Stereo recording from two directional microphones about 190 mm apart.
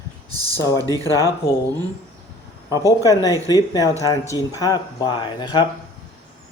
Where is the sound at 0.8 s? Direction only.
20° right (ahead or behind).